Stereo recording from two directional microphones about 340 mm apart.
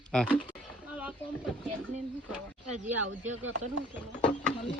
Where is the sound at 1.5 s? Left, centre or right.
Centre.